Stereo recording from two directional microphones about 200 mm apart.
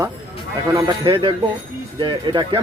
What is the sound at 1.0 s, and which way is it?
Speech, 25° right (ahead or behind).